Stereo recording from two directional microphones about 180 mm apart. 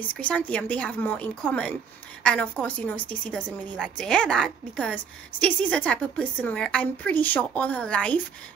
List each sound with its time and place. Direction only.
0.1 s a woman's voice: 5° left (ahead or behind)